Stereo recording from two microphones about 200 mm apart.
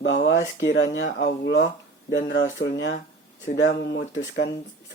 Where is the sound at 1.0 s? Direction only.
55° left (ahead or behind).